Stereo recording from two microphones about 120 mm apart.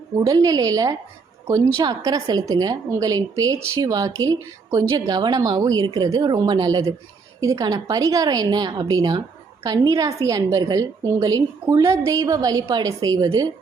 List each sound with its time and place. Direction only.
0.2 s a woman's voice: 35° right (ahead or behind)